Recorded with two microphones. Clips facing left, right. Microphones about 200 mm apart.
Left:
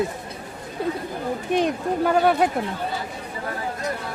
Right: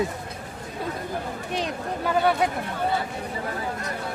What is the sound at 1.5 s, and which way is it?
Speech, 50° left (ahead or behind).